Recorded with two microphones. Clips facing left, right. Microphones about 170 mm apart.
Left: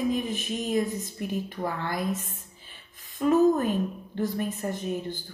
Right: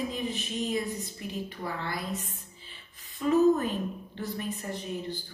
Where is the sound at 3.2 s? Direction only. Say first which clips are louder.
Left 2 dB; 45° left (ahead or behind).